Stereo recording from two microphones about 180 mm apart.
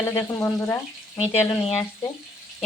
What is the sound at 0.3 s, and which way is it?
Speech, 15° left (ahead or behind).